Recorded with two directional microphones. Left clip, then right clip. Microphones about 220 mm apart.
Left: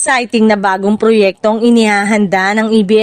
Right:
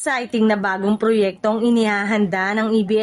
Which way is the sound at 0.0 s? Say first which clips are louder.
Left 8 dB; 40° left (ahead or behind).